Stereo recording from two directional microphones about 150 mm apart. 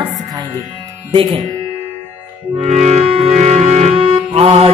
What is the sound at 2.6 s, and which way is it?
Music, 45° right (ahead or behind).